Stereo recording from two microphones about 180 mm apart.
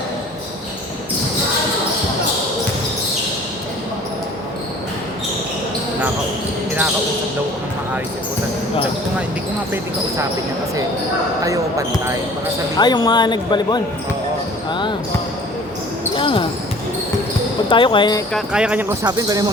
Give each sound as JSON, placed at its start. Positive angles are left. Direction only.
{"t": 11.4, "sound": "speech", "side_deg": -20}
{"t": 12.7, "sound": "speech", "side_deg": 25}
{"t": 16.1, "sound": "speech", "side_deg": 30}
{"t": 17.7, "sound": "speech", "side_deg": 25}
{"t": 18.3, "sound": "speech", "side_deg": -5}
{"t": 19.0, "sound": "speech", "side_deg": -20}